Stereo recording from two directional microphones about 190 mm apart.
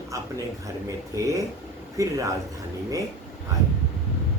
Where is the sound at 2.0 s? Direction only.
15° right (ahead or behind).